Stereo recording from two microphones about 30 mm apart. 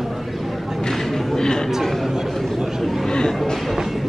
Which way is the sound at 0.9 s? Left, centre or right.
Centre.